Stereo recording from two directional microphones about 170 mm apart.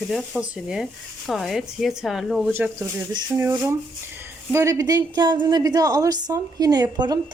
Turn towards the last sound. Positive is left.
turn(degrees=-25)  # may be behind; listen again after turning